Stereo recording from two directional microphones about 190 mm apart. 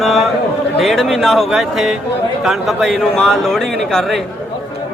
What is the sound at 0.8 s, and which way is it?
Speech, centre (ahead or behind).